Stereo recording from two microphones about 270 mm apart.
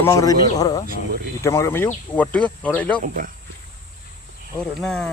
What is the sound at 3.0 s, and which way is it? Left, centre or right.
Speech, right.